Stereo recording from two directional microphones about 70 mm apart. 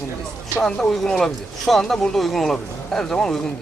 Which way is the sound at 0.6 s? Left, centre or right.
Centre.